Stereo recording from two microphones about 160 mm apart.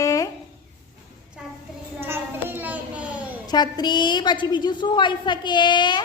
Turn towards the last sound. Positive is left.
turn(degrees=30)  # may be behind; listen again after turning